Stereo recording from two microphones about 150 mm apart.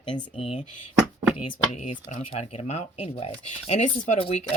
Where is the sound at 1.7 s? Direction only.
50° left (ahead or behind).